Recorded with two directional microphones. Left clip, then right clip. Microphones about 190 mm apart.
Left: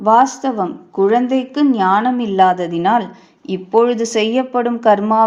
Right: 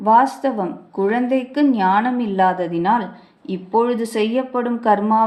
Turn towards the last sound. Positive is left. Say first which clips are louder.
# left 3 dB
turn(degrees=30)  # may be behind; listen again after turning